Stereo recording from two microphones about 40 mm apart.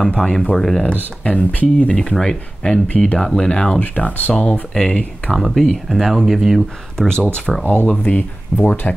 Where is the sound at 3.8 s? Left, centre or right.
Left.